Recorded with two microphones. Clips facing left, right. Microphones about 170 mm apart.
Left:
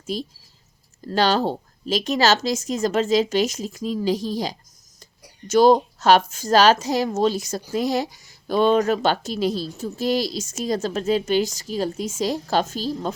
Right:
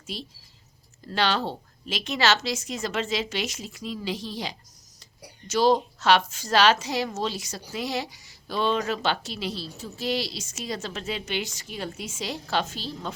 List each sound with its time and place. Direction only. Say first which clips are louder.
0.1 s a woman's voice: left 9 dB; 45° left (ahead or behind)